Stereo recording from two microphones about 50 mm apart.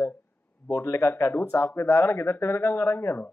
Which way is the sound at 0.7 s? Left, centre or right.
Left.